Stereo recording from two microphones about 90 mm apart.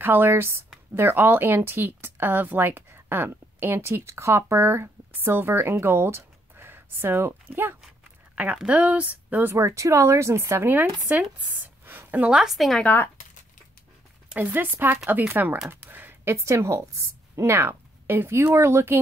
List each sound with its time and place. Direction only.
0.0 s speech: 25° right (ahead or behind)
11.1 s speech: 20° right (ahead or behind)
11.5 s a sound: 20° right (ahead or behind)
12.4 s a woman's voice: centre (ahead or behind)
12.8 s speech: 25° left (ahead or behind)
14.3 s speech: 20° right (ahead or behind)